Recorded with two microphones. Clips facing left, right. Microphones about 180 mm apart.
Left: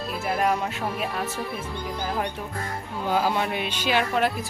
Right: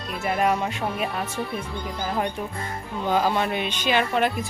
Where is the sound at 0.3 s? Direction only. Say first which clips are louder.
Right 2 dB; centre (ahead or behind).